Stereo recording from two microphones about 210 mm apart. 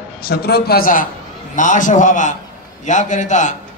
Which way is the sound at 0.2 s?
50° left (ahead or behind).